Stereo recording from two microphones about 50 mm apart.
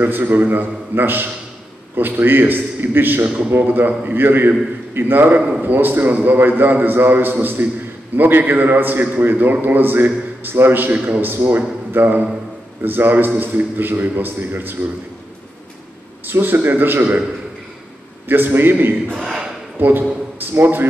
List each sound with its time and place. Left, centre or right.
0.0 s a man's voice: right
16.3 s a man's voice: right
18.3 s a man's voice: right
19.1 s speech: centre
19.8 s a man's voice: right